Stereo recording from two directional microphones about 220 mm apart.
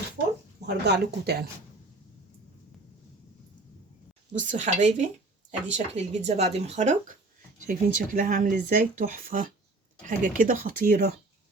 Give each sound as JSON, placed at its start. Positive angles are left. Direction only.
{"t": 0.6, "sound": "speech", "side_deg": -45}
{"t": 4.3, "sound": "speech", "side_deg": -35}